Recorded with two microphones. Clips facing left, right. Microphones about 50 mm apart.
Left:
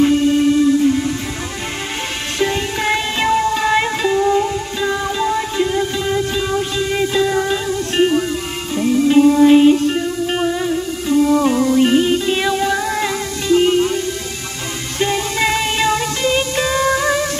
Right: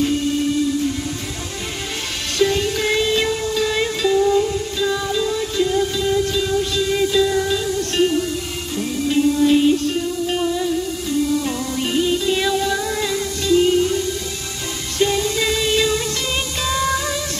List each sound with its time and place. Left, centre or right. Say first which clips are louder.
2.3 s music: right 1 dB; left